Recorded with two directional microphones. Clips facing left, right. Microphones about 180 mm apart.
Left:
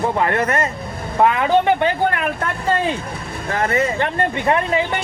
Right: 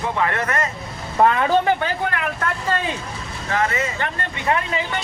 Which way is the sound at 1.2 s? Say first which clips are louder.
Left 1 dB; 15° left (ahead or behind).